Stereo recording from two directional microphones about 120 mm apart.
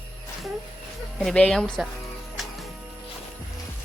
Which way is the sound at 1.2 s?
5° left (ahead or behind).